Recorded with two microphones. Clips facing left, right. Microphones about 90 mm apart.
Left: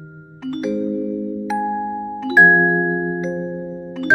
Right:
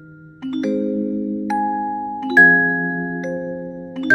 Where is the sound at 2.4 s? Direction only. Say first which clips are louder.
Left 1 dB; 15° left (ahead or behind).